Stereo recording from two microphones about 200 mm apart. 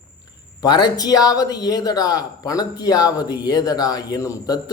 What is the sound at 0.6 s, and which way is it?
A man's voice, 20° left (ahead or behind).